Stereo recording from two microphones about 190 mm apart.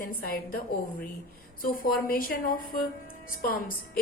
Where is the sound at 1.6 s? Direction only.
50° left (ahead or behind).